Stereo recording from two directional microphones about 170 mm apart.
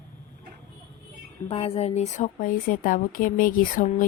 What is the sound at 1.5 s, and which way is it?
Speech, 35° left (ahead or behind).